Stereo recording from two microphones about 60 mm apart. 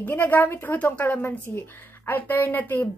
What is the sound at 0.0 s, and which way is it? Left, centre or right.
A woman's voice, left.